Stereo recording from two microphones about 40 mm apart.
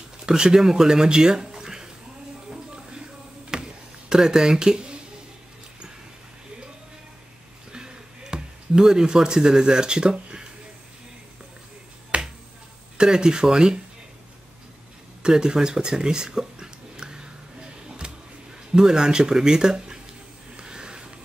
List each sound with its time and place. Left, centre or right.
0.3 s speech: centre
2.5 s music: right
3.5 s a sound: centre
4.1 s speech: centre
7.7 s a sound: right
12.1 s finger snapping: right
12.9 s speech: centre
15.2 s a sound: centre
18.7 s speech: centre
20.5 s sniff: centre